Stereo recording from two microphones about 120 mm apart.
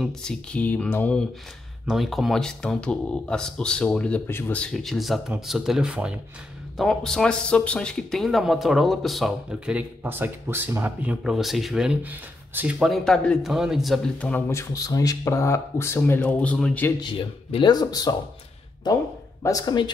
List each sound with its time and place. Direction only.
0.0 s speech: 5° left (ahead or behind)
1.9 s speech: centre (ahead or behind)
10.0 s speech: 20° right (ahead or behind)
12.7 s speech: centre (ahead or behind)
14.1 s speech: 10° left (ahead or behind)
14.5 s speech: 25° left (ahead or behind); by 16.8 s 10° left (ahead or behind)
17.0 s speech: 45° left (ahead or behind)
19.4 s speech: 35° left (ahead or behind)